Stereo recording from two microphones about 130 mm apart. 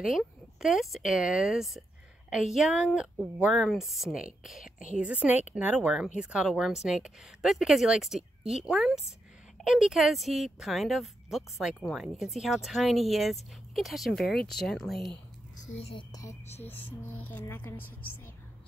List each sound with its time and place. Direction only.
0.0 s a woman's voice: 5° right (ahead or behind)
15.8 s speech: 45° left (ahead or behind)
16.1 s speech: 25° left (ahead or behind)
17.3 s a woman's voice: 15° left (ahead or behind)